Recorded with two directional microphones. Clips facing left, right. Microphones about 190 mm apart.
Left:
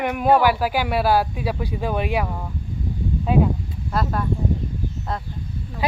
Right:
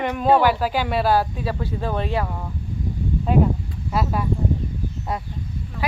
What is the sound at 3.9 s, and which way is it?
Speech, 5° right (ahead or behind).